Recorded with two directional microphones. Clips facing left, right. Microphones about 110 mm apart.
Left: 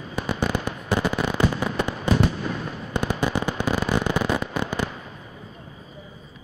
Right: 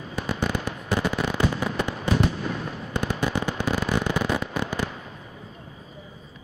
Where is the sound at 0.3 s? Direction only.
45° left (ahead or behind).